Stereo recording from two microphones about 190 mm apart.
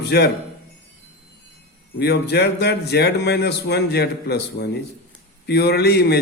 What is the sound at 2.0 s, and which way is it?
A man's voice, 60° left (ahead or behind).